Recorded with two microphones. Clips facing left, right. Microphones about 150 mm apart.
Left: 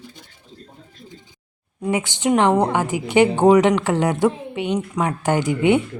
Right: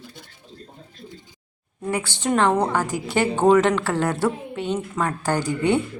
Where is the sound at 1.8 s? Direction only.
15° left (ahead or behind).